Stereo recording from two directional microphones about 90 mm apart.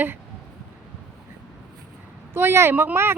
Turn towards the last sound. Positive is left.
turn(degrees=-25)  # may be behind; listen again after turning